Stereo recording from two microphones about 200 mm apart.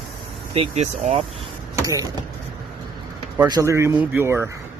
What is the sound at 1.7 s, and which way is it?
Vehicle, 15° right (ahead or behind).